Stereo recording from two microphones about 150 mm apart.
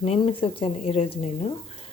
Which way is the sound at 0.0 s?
40° left (ahead or behind).